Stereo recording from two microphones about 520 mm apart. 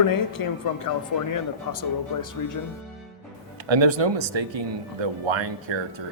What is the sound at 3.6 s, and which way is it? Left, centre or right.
Speech, right.